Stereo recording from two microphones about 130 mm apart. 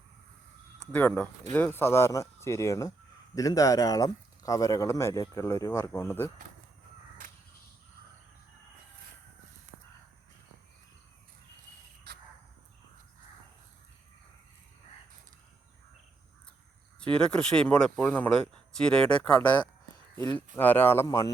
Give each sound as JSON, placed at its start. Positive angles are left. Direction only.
{"t": 0.8, "sound": "speech", "side_deg": 15}
{"t": 17.0, "sound": "speech", "side_deg": 5}